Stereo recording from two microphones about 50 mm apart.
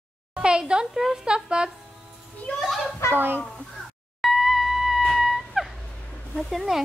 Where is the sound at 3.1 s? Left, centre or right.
Right.